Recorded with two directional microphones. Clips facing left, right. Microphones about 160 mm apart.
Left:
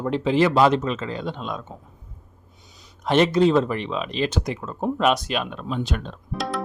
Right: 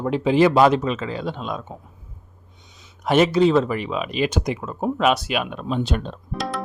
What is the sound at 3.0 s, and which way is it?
Speech, 5° right (ahead or behind).